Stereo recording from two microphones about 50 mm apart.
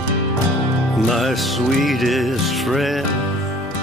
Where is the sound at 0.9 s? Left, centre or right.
Centre.